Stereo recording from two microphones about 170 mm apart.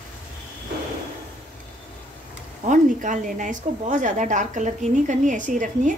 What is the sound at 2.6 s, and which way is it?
A woman's voice, 50° right (ahead or behind).